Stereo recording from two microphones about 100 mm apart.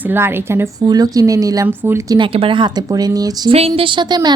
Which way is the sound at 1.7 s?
20° right (ahead or behind).